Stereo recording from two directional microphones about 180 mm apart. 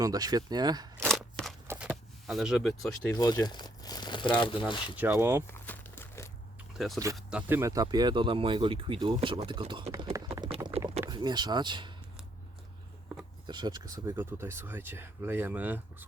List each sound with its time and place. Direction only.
0.0 s speech: 20° right (ahead or behind)
1.0 s scissors: centre (ahead or behind)
1.6 s power windows: 10° right (ahead or behind)
3.2 s speech: 20° left (ahead or behind)
4.9 s speech: 10° right (ahead or behind)
5.5 s crumpling: 10° left (ahead or behind)
6.7 s speech: centre (ahead or behind); by 10.2 s 20° right (ahead or behind)
10.8 s rowboat: 35° right (ahead or behind)
11.1 s speech: 25° right (ahead or behind)
13.5 s speech: 25° right (ahead or behind)